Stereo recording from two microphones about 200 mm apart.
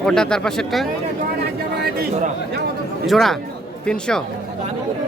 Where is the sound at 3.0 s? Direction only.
Centre (ahead or behind).